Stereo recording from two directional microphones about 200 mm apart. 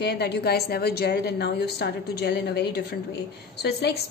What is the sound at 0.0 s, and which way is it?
A woman's voice, 55° left (ahead or behind).